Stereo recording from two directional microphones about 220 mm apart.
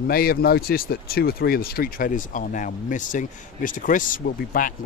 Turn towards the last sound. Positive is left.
turn(degrees=40)  # may be behind; listen again after turning